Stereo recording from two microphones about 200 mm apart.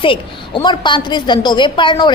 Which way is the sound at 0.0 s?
25° left (ahead or behind).